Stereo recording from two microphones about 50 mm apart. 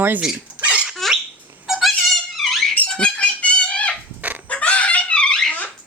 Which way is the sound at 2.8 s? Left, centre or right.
Left.